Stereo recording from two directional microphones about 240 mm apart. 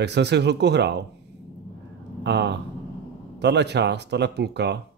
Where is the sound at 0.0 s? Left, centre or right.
Right.